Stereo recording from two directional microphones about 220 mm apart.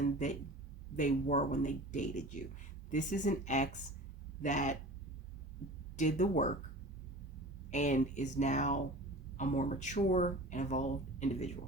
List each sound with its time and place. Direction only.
0.0 s speech: 35° left (ahead or behind)
6.0 s speech: 35° left (ahead or behind)
7.7 s speech: 35° left (ahead or behind)